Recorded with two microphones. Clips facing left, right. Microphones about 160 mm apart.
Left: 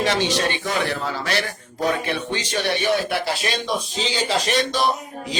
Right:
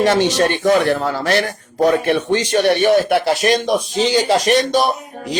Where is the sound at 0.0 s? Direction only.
45° right (ahead or behind).